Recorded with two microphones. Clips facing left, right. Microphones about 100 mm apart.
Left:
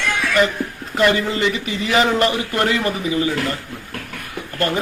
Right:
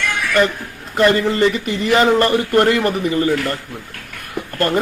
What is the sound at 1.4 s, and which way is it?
Speech, 45° right (ahead or behind).